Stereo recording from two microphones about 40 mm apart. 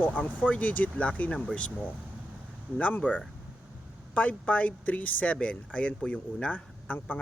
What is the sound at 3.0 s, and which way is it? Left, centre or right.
Speech, left.